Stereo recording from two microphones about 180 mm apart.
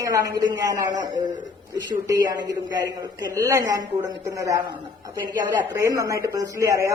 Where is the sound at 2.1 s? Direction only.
20° right (ahead or behind).